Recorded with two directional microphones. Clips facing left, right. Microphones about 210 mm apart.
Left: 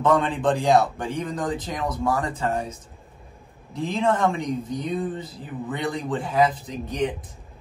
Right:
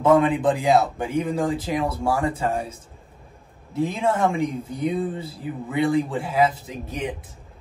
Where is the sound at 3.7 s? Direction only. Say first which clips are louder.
Right 1 dB; 10° right (ahead or behind).